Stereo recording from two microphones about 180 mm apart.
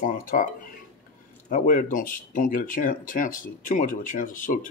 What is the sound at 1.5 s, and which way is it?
Speech, 50° left (ahead or behind).